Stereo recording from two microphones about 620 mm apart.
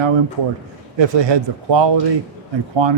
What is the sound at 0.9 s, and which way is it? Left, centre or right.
Speech, right.